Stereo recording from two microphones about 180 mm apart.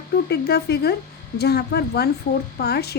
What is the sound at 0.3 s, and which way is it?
Speech, 65° left (ahead or behind).